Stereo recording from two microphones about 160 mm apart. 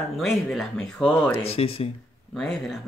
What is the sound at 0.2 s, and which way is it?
Speech, centre (ahead or behind).